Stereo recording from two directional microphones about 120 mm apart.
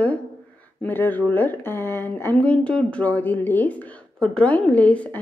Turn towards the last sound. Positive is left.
turn(degrees=10)  # may be behind; listen again after turning